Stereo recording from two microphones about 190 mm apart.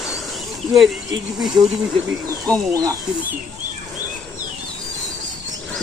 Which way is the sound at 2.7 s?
15° right (ahead or behind).